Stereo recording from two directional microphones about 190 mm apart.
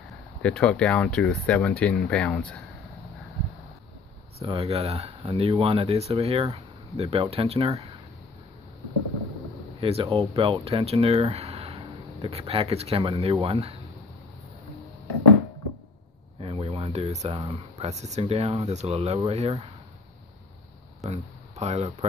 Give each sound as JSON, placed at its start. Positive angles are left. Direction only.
{"t": 0.4, "sound": "speech", "side_deg": 5}
{"t": 4.4, "sound": "speech", "side_deg": -30}
{"t": 9.8, "sound": "speech", "side_deg": -30}
{"t": 16.3, "sound": "a sound", "side_deg": -30}
{"t": 17.4, "sound": "speech", "side_deg": -20}
{"t": 17.8, "sound": "speech", "side_deg": -35}
{"t": 21.1, "sound": "speech", "side_deg": -35}